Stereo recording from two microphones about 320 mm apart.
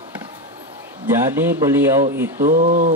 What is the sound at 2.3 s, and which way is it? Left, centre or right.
Speech, right.